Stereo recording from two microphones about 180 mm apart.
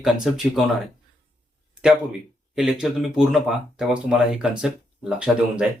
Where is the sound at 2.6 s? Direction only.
5° right (ahead or behind).